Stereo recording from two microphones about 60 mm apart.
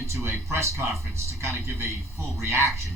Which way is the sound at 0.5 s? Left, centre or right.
Right.